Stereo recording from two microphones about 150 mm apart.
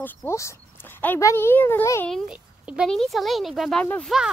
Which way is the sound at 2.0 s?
Centre (ahead or behind).